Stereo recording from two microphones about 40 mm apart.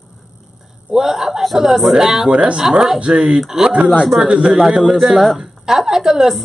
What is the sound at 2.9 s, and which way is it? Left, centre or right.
A woman's voice, right.